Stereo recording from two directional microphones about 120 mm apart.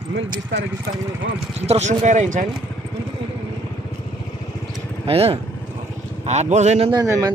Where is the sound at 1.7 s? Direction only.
80° right.